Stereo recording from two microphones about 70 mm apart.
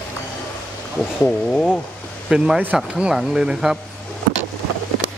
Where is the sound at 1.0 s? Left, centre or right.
Centre.